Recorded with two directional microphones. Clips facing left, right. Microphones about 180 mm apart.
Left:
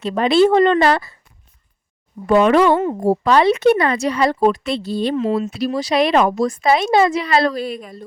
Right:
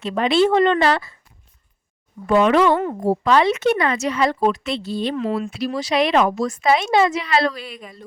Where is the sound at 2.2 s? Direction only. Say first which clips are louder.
Left 2 dB; 45° left (ahead or behind).